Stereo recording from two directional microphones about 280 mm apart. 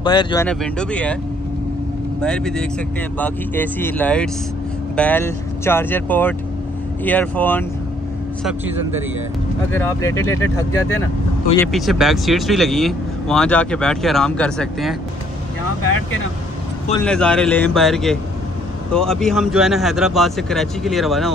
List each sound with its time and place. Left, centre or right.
0.0 s speech: centre
0.5 s speech: centre
2.1 s speech: centre
8.5 s speech: centre
9.7 s speech: centre
17.0 s speech: centre